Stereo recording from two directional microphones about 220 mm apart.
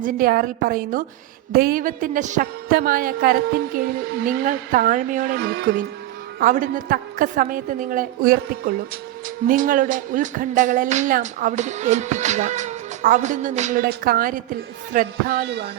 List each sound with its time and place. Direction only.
0.0 s speech: 40° right (ahead or behind)
6.4 s speech: 35° right (ahead or behind)